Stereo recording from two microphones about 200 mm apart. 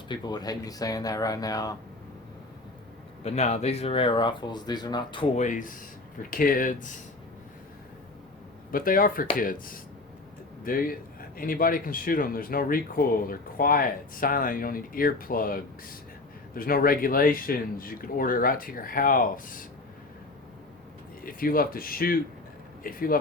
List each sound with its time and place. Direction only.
0.1 s speech: 20° left (ahead or behind)
3.2 s speech: 35° left (ahead or behind)
5.4 s a man's voice: 40° left (ahead or behind)
8.7 s a man's voice: 45° left (ahead or behind)
21.2 s a man's voice: 45° left (ahead or behind)